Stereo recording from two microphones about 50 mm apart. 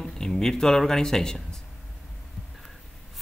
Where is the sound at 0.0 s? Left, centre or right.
Centre.